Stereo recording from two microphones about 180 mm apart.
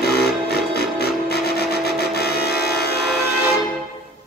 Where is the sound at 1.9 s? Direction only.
60° left (ahead or behind).